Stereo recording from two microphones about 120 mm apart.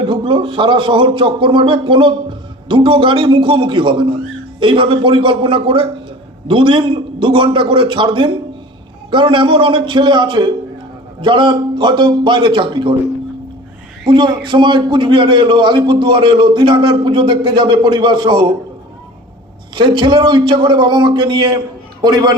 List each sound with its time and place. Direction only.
0.0 s a man's voice: 45° right (ahead or behind)
14.0 s a man's voice: 40° right (ahead or behind)
19.7 s a man's voice: 40° right (ahead or behind)